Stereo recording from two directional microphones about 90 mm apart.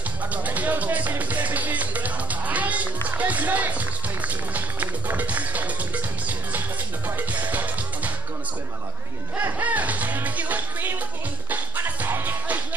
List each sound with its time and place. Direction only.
0.3 s music: 20° right (ahead or behind)
3.1 s speech: 15° right (ahead or behind)
7.2 s music: 20° right (ahead or behind)
9.4 s music: 20° right (ahead or behind)